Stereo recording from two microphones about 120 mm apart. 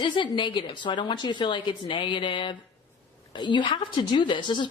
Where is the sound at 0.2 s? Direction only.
40° left (ahead or behind).